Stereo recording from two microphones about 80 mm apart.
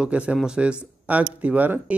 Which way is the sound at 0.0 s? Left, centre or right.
Centre.